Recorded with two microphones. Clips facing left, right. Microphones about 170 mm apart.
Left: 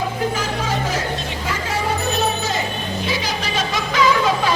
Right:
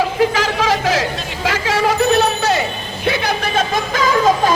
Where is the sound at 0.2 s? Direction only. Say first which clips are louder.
Right 6 dB; 90° right; by 2.6 s 70° right (ahead or behind).